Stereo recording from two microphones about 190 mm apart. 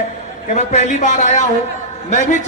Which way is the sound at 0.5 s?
40° left (ahead or behind).